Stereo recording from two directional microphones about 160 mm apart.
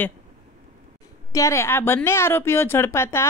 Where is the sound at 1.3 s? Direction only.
20° left (ahead or behind).